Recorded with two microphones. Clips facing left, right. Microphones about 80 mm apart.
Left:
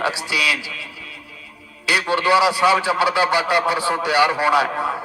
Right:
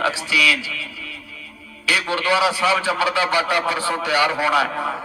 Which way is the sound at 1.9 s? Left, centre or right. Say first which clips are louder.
Left 3 dB; centre.